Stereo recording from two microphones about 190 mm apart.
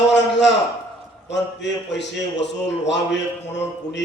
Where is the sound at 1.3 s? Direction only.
70° left (ahead or behind).